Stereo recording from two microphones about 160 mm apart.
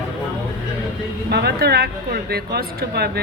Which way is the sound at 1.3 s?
90° right.